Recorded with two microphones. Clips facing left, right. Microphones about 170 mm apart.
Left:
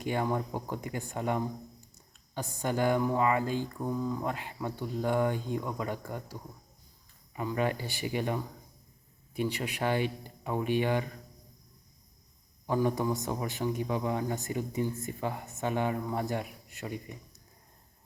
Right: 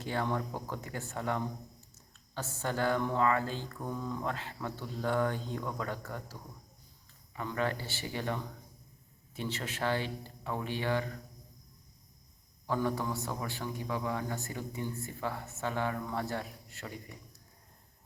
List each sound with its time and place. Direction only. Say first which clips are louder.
0.0 s a man's voice: left 3 dB; 15° left (ahead or behind)
7.3 s a man's voice: left 3 dB; 15° left (ahead or behind)
12.6 s a man's voice: left 4 dB; 15° left (ahead or behind)